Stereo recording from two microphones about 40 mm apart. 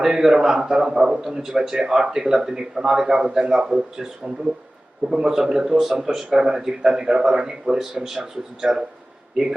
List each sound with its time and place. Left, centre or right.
0.0 s speech: centre
5.0 s speech: centre